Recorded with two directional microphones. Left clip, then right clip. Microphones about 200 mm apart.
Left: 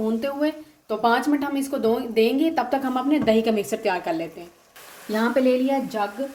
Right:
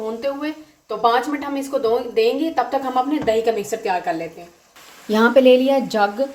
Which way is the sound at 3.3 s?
45° left (ahead or behind).